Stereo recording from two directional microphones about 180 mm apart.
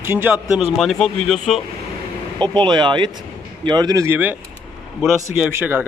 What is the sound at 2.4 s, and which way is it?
Speech, 25° right (ahead or behind).